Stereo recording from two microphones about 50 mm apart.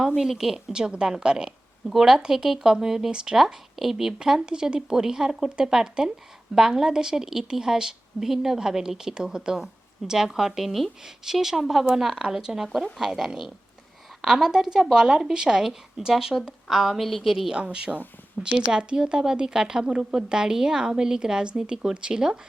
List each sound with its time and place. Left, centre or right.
0.2 s a woman's voice: centre
17.5 s a woman's voice: centre